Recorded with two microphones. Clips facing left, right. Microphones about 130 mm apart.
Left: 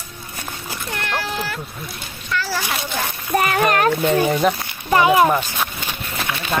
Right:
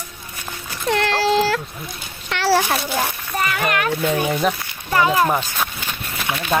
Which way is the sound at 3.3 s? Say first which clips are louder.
Left 5 dB; 45° left (ahead or behind).